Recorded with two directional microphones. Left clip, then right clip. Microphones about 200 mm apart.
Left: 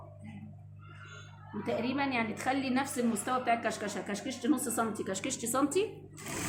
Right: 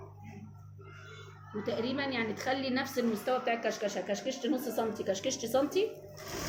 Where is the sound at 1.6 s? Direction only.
30° left (ahead or behind).